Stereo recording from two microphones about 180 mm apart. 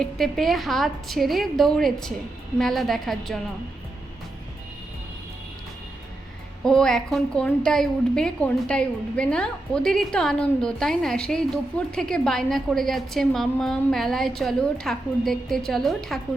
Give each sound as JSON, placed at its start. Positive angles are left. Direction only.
{"t": 0.0, "sound": "a woman's voice", "side_deg": 0}
{"t": 6.7, "sound": "a woman's voice", "side_deg": 5}